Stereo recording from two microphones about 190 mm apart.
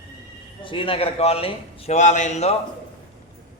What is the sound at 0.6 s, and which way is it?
A man's voice, 25° left (ahead or behind).